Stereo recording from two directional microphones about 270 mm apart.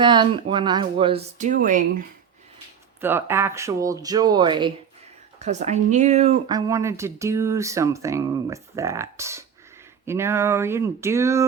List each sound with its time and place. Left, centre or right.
0.0 s speech: centre
3.0 s speech: centre